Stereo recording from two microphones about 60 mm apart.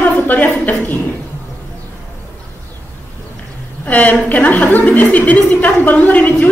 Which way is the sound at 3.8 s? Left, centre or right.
Left.